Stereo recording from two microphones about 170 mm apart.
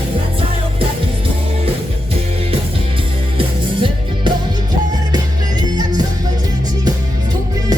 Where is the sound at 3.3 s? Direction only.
30° right (ahead or behind).